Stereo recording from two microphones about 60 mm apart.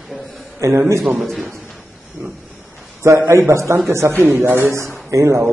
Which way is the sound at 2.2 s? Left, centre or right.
Right.